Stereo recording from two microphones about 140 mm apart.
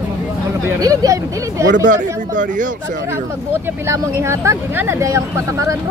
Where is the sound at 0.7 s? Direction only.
25° right (ahead or behind).